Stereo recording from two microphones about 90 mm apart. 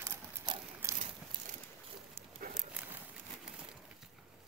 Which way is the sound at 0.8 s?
30° right (ahead or behind).